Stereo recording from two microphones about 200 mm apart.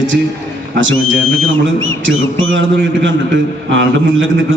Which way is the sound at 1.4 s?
75° right (ahead or behind).